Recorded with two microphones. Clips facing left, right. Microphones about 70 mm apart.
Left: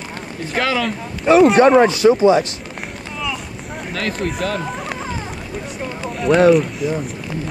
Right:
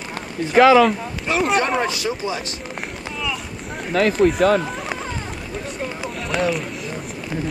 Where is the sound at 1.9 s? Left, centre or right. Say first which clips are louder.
Left 12 dB; left.